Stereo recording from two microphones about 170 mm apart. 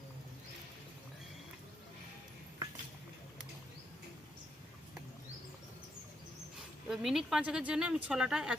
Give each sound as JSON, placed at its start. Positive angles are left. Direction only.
{"t": 6.8, "sound": "speech", "side_deg": 0}